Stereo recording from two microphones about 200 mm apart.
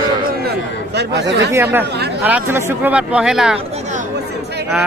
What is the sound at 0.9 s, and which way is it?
Speech, 55° right (ahead or behind).